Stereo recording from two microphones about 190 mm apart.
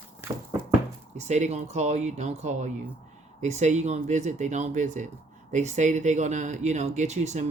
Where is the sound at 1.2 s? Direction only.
35° right (ahead or behind).